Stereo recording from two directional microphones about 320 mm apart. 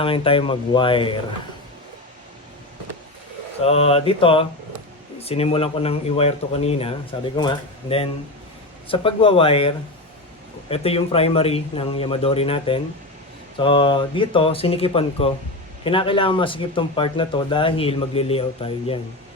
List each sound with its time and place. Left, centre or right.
0.0 s speech: centre
3.6 s speech: centre